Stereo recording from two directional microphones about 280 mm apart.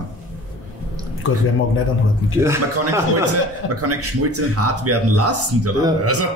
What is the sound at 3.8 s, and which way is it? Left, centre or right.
Speech, right.